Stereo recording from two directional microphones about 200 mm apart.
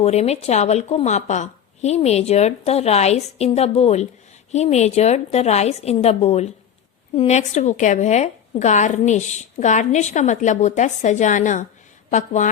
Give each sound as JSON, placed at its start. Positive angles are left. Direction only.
{"t": 0.0, "sound": "a woman's voice", "side_deg": 30}